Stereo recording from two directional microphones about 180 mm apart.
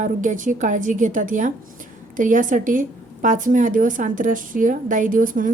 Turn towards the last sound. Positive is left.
turn(degrees=-50)  # may be behind; listen again after turning